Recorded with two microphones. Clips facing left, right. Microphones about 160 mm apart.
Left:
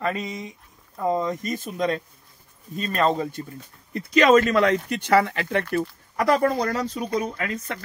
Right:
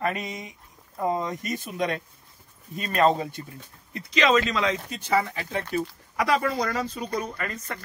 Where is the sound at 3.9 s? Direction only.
45° left (ahead or behind); by 5.8 s 65° left (ahead or behind).